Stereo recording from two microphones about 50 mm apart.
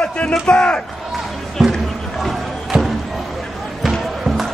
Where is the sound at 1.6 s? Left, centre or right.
Centre.